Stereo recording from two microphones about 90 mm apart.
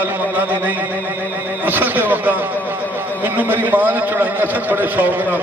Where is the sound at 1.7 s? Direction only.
20° right (ahead or behind).